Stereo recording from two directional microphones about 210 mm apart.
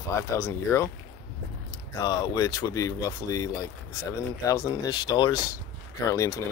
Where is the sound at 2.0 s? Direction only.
20° left (ahead or behind).